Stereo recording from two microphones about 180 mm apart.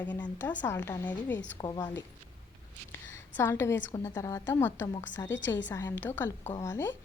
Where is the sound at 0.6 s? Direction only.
10° left (ahead or behind).